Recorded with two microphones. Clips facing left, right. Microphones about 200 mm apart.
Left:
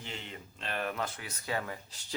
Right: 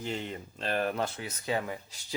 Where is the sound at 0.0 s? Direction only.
40° right (ahead or behind).